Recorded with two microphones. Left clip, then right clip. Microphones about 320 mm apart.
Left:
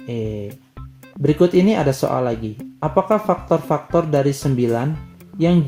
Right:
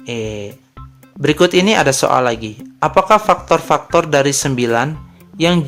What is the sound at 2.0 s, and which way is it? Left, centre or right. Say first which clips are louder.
Speech: right 6 dB; right.